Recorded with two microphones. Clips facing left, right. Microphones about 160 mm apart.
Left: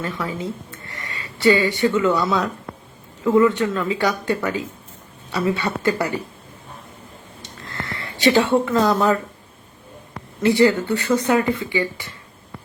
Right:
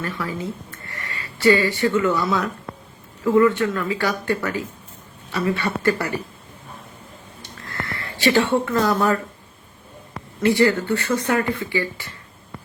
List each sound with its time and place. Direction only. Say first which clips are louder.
0.0 s speech: left 1 dB; 20° left (ahead or behind)
7.7 s speech: even; 25° left (ahead or behind)
10.4 s speech: left 2 dB; 15° left (ahead or behind)